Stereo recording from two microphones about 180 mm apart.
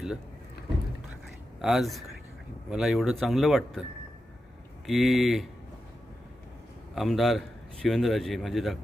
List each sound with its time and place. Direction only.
1.6 s a man's voice: centre (ahead or behind)
4.9 s a man's voice: centre (ahead or behind)
6.9 s a man's voice: centre (ahead or behind)